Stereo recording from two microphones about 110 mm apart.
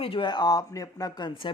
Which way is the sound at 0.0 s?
50° left (ahead or behind).